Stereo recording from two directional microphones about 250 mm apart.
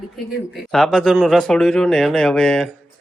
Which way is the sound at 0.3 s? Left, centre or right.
Centre.